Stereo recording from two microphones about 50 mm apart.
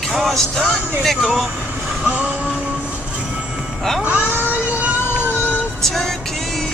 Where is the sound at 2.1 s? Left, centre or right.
Right.